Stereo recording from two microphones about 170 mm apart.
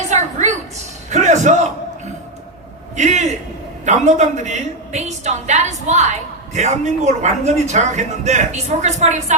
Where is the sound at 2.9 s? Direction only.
45° right (ahead or behind).